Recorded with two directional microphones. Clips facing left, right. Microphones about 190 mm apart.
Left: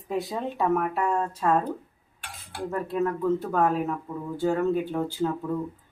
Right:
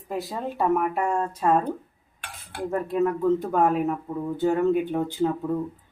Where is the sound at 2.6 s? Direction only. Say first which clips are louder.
Right 3 dB; 15° right (ahead or behind).